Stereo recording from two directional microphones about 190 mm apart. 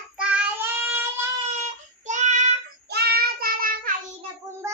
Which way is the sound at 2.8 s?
55° right (ahead or behind).